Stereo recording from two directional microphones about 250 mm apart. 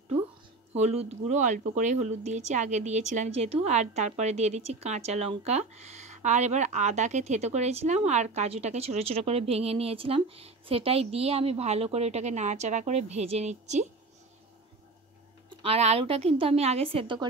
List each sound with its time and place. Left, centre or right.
0.7 s speech: right
15.5 s speech: right